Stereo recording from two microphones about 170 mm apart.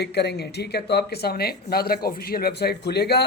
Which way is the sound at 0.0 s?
75° left (ahead or behind).